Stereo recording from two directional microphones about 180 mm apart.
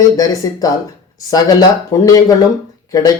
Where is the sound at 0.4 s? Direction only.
20° left (ahead or behind).